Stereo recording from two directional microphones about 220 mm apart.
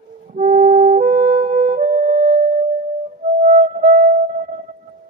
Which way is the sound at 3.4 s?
40° right (ahead or behind).